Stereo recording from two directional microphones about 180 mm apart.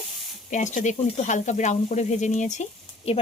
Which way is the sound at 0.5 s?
45° left (ahead or behind).